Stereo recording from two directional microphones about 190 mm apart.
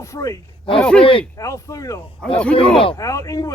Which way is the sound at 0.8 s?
5° left (ahead or behind).